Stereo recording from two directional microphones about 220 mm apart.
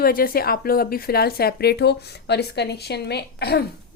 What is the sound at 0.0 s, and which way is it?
A woman's voice, 40° left (ahead or behind).